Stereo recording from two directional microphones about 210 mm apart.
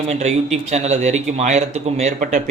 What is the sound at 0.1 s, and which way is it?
A man's voice, 30° right (ahead or behind).